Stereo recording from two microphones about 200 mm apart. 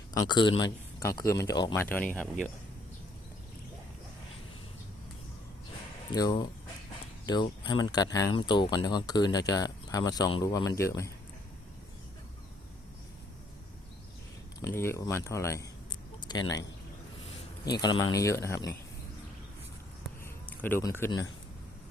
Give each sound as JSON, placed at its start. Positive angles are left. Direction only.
{"t": 0.1, "sound": "a man's voice", "side_deg": 20}
{"t": 6.1, "sound": "speech", "side_deg": 20}
{"t": 14.6, "sound": "speech", "side_deg": 10}
{"t": 16.2, "sound": "a sound", "side_deg": 20}
{"t": 17.7, "sound": "speech", "side_deg": 20}
{"t": 20.2, "sound": "a sound", "side_deg": 10}